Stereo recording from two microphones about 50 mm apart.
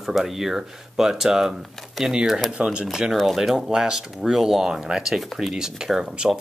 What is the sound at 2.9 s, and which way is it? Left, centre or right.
Speech, centre.